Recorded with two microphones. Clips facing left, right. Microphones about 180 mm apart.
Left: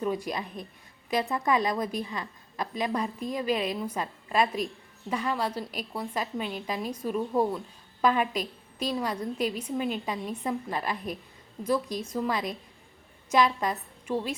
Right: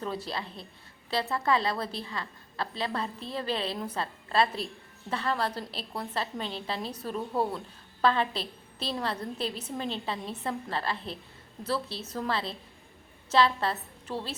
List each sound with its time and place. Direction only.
0.0 s a woman's voice: 15° left (ahead or behind)